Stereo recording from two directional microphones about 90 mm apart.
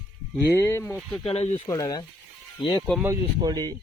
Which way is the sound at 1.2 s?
80° left.